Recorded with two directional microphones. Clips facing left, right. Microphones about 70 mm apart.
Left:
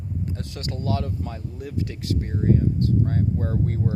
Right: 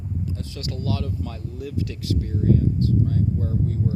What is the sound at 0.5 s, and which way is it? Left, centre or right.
Speech, left.